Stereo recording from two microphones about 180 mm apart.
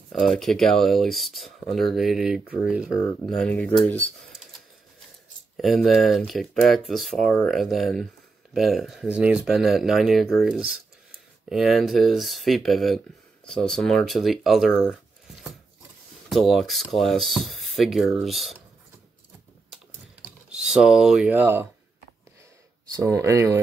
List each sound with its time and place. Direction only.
0.1 s speech: centre (ahead or behind)
5.6 s speech: centre (ahead or behind)
20.5 s speech: 5° right (ahead or behind)
22.9 s speech: 15° right (ahead or behind)